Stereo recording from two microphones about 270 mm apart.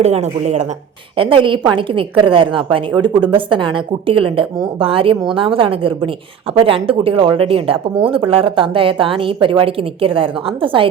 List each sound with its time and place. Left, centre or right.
0.0 s speech: right